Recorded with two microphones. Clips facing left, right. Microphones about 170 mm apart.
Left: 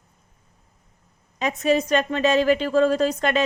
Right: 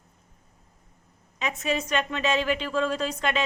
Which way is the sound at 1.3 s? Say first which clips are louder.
Left 7 dB; 40° left (ahead or behind).